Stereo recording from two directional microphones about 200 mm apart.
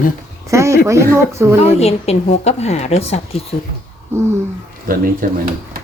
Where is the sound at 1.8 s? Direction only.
30° left (ahead or behind).